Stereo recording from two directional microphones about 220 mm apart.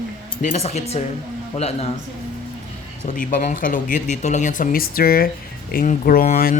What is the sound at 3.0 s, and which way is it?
Speech, 35° left (ahead or behind).